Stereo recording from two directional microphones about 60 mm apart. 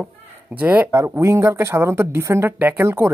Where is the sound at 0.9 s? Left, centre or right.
Right.